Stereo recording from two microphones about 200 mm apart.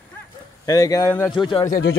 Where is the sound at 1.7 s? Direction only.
50° left (ahead or behind).